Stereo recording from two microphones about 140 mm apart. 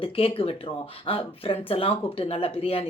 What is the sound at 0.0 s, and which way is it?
Speech, 40° left (ahead or behind).